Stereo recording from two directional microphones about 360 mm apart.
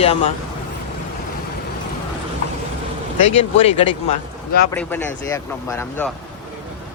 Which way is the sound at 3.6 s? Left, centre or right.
Centre.